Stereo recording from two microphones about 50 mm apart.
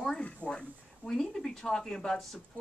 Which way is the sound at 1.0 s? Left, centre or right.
Centre.